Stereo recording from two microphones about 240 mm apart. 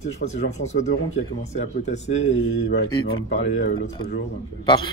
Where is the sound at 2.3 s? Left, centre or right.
Left.